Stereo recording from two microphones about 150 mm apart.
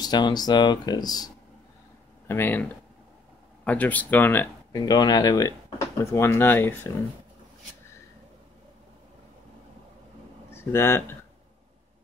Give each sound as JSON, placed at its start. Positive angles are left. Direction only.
{"t": 0.0, "sound": "speech", "side_deg": 30}
{"t": 2.2, "sound": "speech", "side_deg": 15}
{"t": 4.7, "sound": "speech", "side_deg": 25}
{"t": 10.5, "sound": "speech", "side_deg": 15}